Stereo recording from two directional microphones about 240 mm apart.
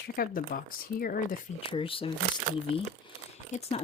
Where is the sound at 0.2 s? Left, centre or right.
Left.